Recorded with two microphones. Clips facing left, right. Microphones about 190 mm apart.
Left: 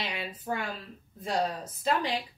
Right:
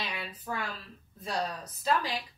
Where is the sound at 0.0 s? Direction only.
25° left (ahead or behind).